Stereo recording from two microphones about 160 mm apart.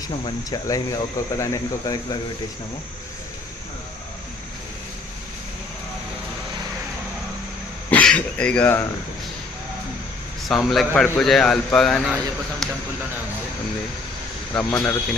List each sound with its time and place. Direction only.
0.1 s speech: 30° left (ahead or behind)
7.9 s a sound: 10° left (ahead or behind)
10.5 s speech: centre (ahead or behind)
14.5 s speech: 15° left (ahead or behind)